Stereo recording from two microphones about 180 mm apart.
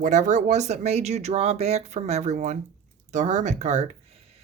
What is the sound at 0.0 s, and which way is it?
Speech, 40° right (ahead or behind).